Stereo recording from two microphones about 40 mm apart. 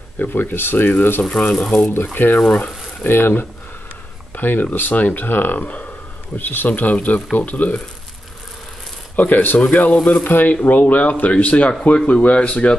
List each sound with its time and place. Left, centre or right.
0.2 s speech: left
1.3 s speech: left
2.1 s speech: left
3.1 s speech: left
6.3 s speech: left
6.7 s speech: left
9.1 s speech: left
9.6 s speech: left
10.2 s speech: left